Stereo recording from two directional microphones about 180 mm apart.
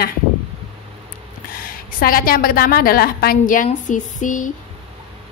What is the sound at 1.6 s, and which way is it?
A woman's voice, 55° left (ahead or behind).